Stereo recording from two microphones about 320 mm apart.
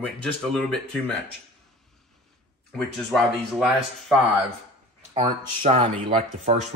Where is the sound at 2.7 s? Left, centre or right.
Centre.